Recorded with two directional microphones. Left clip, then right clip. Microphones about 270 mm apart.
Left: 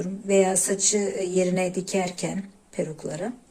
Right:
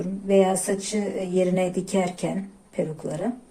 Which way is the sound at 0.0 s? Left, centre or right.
Centre.